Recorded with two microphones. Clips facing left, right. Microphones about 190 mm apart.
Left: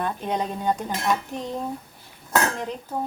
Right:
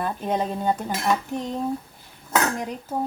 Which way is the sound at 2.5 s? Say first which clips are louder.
Right 1 dB; 10° right (ahead or behind).